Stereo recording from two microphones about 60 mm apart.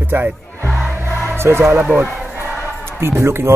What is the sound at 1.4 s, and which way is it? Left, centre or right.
Speech, right.